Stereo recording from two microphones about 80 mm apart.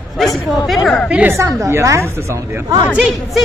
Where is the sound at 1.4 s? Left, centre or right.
Right.